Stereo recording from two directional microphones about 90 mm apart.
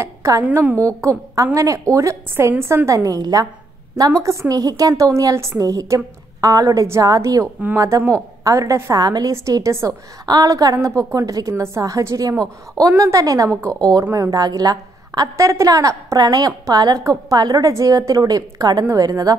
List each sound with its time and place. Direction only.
0.0 s a woman's voice: 35° right (ahead or behind)
0.5 s a woman's voice: 20° right (ahead or behind)
1.0 s a woman's voice: 40° right (ahead or behind)
3.2 s a woman's voice: 45° right (ahead or behind)
8.9 s a woman's voice: 45° right (ahead or behind)